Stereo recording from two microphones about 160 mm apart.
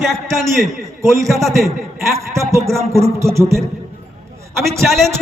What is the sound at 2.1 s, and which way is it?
A man's voice, 20° right (ahead or behind).